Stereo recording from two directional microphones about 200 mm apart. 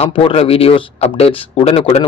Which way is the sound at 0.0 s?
30° left (ahead or behind).